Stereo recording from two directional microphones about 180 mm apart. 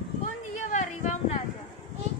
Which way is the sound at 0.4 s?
40° left (ahead or behind).